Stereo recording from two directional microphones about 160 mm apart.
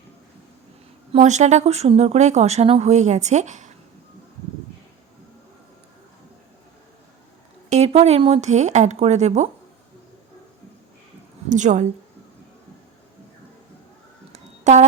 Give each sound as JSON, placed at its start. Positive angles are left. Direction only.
{"t": 1.1, "sound": "speech", "side_deg": -45}
{"t": 7.7, "sound": "speech", "side_deg": -40}
{"t": 11.4, "sound": "a woman's voice", "side_deg": -50}
{"t": 14.3, "sound": "a sound", "side_deg": -45}